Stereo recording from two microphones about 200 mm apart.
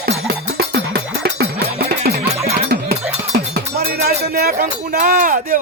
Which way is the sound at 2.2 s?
30° right (ahead or behind).